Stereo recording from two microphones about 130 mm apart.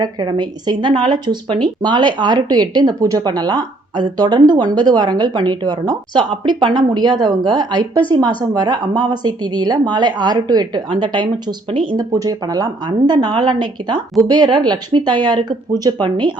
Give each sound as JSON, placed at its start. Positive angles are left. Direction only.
{"t": 0.0, "sound": "speech", "side_deg": -35}